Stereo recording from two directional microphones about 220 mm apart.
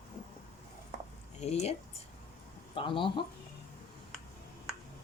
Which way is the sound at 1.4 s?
30° left (ahead or behind).